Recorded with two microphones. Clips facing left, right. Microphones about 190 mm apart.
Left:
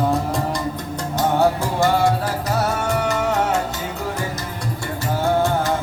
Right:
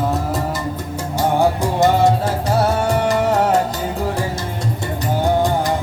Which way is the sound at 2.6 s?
35° right (ahead or behind).